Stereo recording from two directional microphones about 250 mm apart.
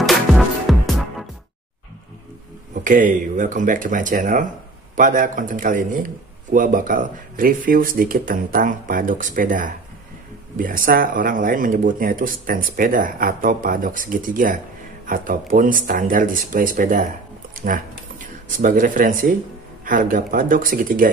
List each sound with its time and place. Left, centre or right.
0.0 s music: centre
2.7 s speech: right